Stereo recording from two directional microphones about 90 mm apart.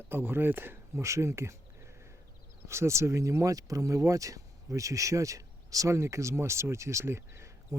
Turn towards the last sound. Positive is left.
turn(degrees=-30)  # may be behind; listen again after turning